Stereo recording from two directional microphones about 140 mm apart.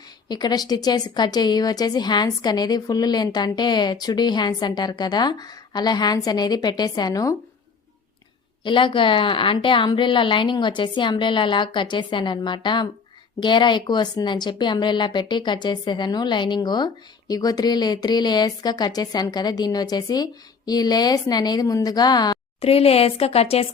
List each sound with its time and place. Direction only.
0.3 s a woman's voice: 30° left (ahead or behind)
8.6 s a woman's voice: 35° left (ahead or behind)
22.6 s speech: 45° left (ahead or behind)